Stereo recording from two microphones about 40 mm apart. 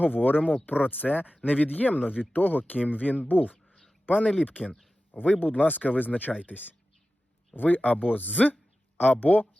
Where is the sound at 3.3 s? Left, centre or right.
Left.